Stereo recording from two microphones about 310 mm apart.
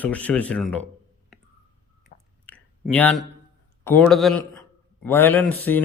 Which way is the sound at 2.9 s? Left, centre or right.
Centre.